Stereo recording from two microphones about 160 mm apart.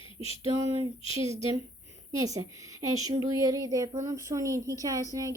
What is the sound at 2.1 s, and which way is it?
A woman's voice, 20° right (ahead or behind).